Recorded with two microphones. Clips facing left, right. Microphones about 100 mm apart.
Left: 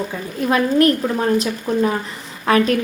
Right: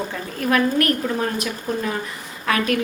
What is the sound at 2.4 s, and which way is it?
Speech, 30° left (ahead or behind).